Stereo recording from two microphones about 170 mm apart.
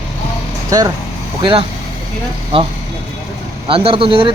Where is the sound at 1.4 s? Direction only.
30° right (ahead or behind).